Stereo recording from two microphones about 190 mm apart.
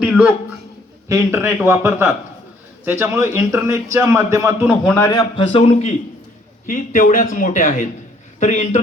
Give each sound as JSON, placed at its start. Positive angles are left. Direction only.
{"t": 0.0, "sound": "a man's voice", "side_deg": -5}
{"t": 4.9, "sound": "a man's voice", "side_deg": 10}
{"t": 5.4, "sound": "a man's voice", "side_deg": 25}
{"t": 6.7, "sound": "a man's voice", "side_deg": 45}